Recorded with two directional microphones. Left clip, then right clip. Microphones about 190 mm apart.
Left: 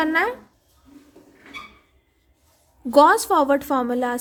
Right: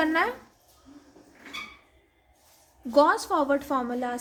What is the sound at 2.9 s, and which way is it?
A woman's voice, 50° left (ahead or behind).